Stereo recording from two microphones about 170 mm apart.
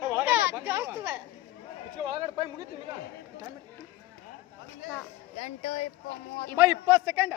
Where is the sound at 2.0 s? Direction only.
25° right (ahead or behind).